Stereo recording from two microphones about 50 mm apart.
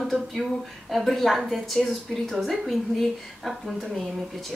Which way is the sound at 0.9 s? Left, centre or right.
Centre.